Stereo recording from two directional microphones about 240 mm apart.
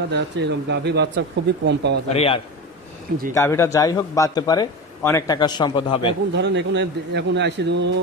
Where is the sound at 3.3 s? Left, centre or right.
Centre.